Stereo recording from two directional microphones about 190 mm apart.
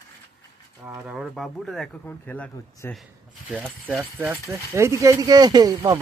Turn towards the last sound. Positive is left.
turn(degrees=-20)  # may be behind; listen again after turning